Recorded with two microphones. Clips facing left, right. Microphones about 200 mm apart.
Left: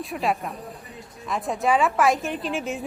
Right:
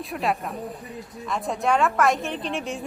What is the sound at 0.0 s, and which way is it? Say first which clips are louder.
A woman's voice: left 1 dB; centre (ahead or behind).